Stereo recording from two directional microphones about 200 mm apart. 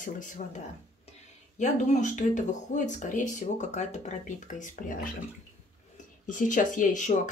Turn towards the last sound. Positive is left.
turn(degrees=40)  # may be behind; listen again after turning